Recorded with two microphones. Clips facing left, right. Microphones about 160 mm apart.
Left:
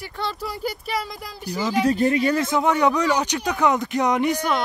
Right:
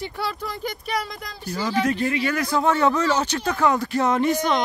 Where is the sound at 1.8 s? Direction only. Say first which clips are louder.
Left 4 dB; 40° left (ahead or behind).